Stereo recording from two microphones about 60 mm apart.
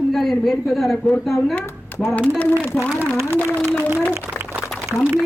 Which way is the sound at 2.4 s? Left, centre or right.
Left.